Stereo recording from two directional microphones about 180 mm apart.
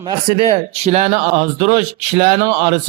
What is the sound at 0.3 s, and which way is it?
A man's voice, 30° right (ahead or behind).